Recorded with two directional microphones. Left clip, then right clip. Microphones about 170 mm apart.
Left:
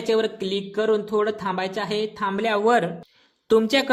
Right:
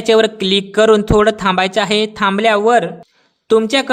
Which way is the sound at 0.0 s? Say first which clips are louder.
Right 10 dB; 40° right (ahead or behind).